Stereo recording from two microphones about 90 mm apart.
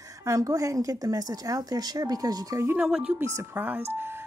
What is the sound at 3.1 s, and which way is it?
Speech, 25° right (ahead or behind).